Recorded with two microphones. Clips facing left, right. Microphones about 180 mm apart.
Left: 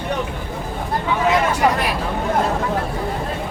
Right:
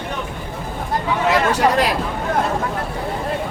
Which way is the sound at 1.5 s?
80° right.